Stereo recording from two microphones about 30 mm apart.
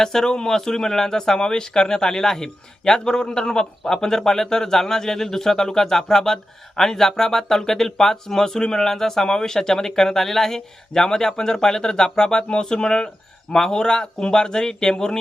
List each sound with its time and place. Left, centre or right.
0.0 s speech: centre